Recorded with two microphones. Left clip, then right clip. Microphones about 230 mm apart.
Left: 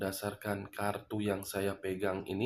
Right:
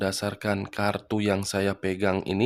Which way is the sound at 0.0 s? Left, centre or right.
Right.